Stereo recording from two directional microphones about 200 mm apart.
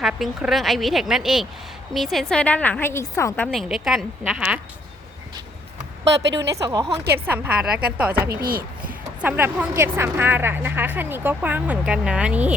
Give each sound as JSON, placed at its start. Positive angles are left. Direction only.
{"t": 0.0, "sound": "a woman's voice", "side_deg": 0}
{"t": 6.1, "sound": "speech", "side_deg": -60}
{"t": 6.6, "sound": "speech", "side_deg": -15}
{"t": 8.3, "sound": "speech", "side_deg": -50}
{"t": 8.9, "sound": "speech", "side_deg": -10}